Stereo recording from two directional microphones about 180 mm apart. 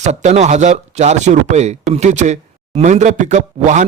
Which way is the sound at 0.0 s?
40° right (ahead or behind).